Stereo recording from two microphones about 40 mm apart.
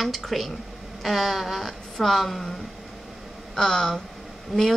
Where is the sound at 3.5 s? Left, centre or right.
Centre.